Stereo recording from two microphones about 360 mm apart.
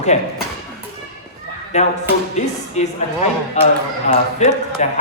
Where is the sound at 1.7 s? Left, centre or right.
Centre.